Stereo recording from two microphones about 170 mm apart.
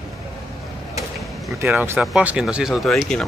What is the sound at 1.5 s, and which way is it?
Speech, 15° right (ahead or behind).